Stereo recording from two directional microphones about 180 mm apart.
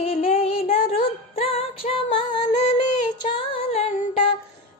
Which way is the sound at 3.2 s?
30° left (ahead or behind).